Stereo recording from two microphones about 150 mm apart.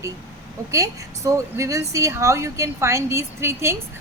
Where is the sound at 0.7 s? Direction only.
20° right (ahead or behind).